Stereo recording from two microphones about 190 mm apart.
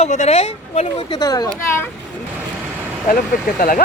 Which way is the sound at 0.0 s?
35° left (ahead or behind).